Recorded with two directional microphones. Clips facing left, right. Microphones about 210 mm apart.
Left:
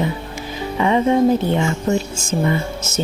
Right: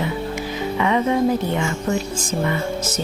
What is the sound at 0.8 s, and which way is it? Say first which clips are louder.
Speech: left 4 dB; 30° left (ahead or behind).